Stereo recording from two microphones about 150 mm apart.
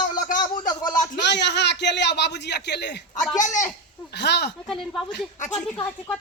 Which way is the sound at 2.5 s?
90° left.